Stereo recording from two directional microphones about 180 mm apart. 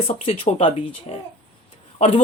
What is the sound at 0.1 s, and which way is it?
Speech, 35° left (ahead or behind).